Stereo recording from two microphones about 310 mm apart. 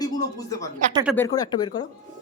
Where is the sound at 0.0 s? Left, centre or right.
Centre.